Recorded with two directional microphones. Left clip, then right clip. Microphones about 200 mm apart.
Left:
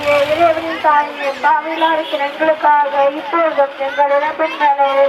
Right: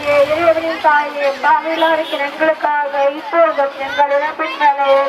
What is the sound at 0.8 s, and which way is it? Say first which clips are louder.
Speech: even; 10° right (ahead or behind).